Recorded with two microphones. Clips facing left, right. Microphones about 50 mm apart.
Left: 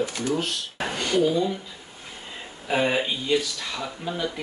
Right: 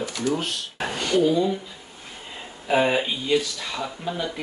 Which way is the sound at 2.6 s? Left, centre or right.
Centre.